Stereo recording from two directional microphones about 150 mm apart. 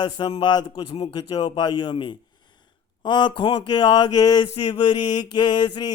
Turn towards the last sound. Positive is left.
turn(degrees=30)  # may be behind; listen again after turning